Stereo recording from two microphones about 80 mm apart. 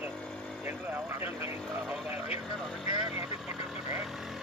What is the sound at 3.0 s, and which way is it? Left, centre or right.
Speech, centre.